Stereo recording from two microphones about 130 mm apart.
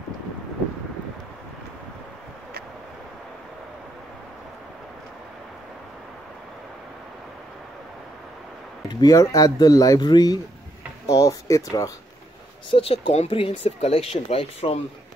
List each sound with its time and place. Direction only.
9.0 s speech: 25° left (ahead or behind)
11.1 s a sound: 25° left (ahead or behind)
12.7 s speech: 45° left (ahead or behind)